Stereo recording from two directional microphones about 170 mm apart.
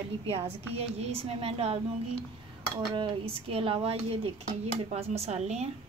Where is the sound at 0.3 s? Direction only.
35° right (ahead or behind).